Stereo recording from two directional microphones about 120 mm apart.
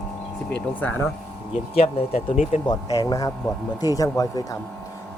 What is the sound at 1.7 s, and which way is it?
Speech, 60° left (ahead or behind).